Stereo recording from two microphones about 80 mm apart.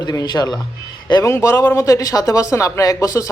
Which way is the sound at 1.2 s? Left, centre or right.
Left.